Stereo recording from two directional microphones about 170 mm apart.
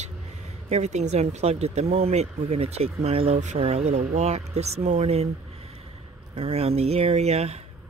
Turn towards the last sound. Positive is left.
turn(degrees=-40)  # may be behind; listen again after turning